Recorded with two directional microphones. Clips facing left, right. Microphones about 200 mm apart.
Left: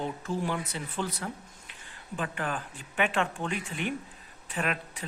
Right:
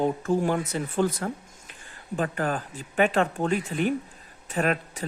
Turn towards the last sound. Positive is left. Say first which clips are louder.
# right 7 dB
turn(degrees=-40)  # may be behind; listen again after turning